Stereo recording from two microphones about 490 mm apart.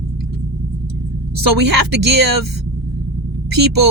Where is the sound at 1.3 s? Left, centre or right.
Right.